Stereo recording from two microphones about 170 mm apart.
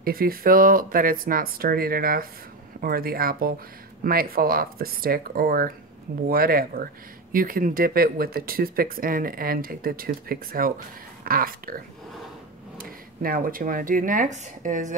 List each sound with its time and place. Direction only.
0.0 s speech: 60° right (ahead or behind)